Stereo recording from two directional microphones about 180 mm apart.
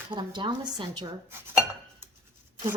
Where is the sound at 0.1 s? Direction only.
25° right (ahead or behind).